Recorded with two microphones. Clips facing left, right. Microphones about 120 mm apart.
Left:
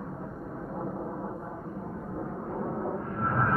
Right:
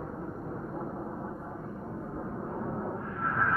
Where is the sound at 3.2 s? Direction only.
35° left (ahead or behind).